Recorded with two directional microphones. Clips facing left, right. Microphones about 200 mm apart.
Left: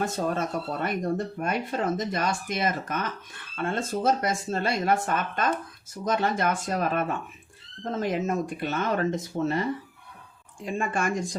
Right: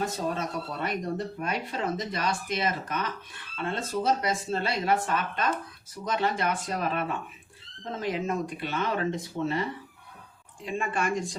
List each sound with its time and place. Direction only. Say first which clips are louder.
0.0 s speech: left 3 dB; 50° left (ahead or behind)